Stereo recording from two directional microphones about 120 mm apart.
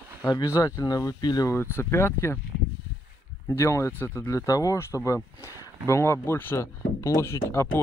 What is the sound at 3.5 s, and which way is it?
Speech, 25° left (ahead or behind).